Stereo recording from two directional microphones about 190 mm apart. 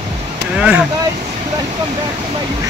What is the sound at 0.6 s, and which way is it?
Speech, 5° right (ahead or behind).